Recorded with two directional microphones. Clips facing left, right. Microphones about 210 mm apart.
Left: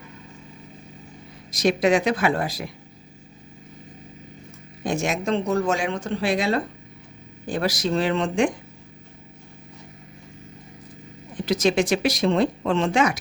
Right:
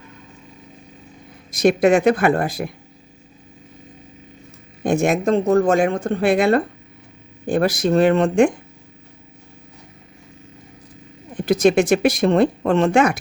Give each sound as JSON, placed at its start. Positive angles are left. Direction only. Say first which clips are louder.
{"t": 1.6, "sound": "speech", "louder": "right 5 dB", "side_deg": -55}
{"t": 4.8, "sound": "speech", "louder": "right 7 dB", "side_deg": -55}
{"t": 7.4, "sound": "speech", "louder": "right 6 dB", "side_deg": -50}
{"t": 11.3, "sound": "speech", "louder": "right 5 dB", "side_deg": -45}